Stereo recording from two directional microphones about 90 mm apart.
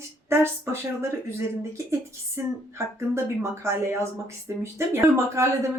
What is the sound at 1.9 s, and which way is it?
A woman's voice, 30° right (ahead or behind).